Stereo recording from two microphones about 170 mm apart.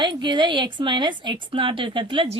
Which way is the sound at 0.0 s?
25° right (ahead or behind).